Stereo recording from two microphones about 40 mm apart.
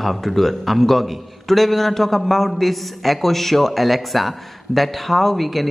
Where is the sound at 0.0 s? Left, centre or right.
Centre.